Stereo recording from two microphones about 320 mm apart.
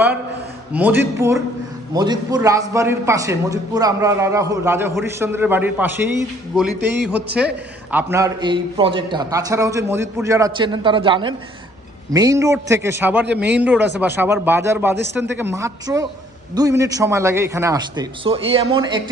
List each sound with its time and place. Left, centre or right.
0.7 s a man's voice: centre
13.2 s speech: right
13.6 s a man's voice: centre